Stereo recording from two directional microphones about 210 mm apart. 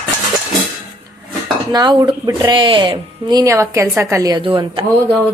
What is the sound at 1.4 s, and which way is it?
Speech, 20° right (ahead or behind).